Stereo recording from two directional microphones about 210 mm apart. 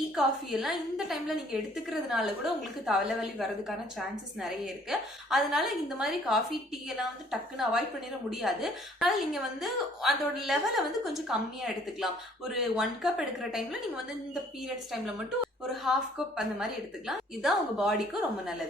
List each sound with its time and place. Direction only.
0.2 s a woman's voice: centre (ahead or behind)